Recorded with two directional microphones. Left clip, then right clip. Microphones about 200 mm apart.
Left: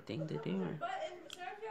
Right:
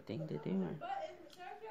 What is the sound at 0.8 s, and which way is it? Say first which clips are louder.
Speech: left 4 dB; 30° left (ahead or behind).